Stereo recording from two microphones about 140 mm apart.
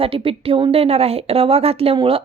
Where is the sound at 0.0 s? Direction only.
40° right (ahead or behind).